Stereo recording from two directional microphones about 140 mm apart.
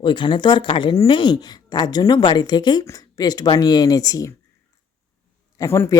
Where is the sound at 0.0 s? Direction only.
35° left (ahead or behind).